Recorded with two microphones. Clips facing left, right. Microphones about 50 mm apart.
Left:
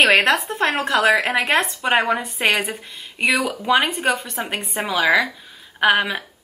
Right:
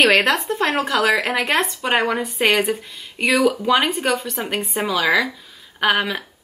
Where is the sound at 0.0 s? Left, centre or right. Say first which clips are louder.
Even; centre.